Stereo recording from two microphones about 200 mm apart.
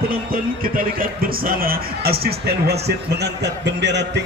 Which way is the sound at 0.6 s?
45° right (ahead or behind).